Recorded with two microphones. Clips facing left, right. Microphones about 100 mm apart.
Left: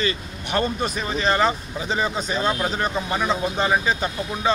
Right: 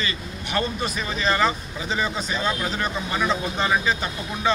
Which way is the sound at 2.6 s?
25° left (ahead or behind).